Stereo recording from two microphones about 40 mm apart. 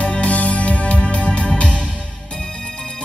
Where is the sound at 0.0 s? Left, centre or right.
Left.